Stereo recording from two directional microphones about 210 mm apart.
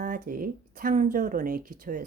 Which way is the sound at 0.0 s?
40° right (ahead or behind).